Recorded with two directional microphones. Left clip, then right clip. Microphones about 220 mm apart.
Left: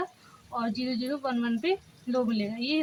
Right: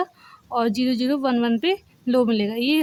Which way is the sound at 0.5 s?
55° right (ahead or behind).